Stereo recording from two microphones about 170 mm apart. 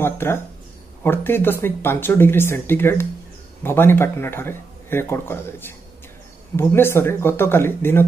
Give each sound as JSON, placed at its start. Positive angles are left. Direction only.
{"t": 0.0, "sound": "speech", "side_deg": 15}